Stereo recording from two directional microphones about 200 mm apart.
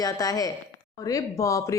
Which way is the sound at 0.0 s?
20° left (ahead or behind).